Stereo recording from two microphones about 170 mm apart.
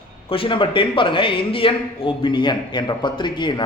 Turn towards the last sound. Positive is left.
turn(degrees=25)  # may be behind; listen again after turning